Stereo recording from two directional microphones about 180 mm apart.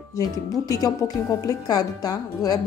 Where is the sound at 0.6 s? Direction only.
20° left (ahead or behind).